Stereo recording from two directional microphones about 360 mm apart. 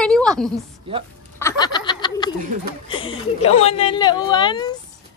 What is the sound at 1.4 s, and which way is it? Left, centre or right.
Snicker, centre.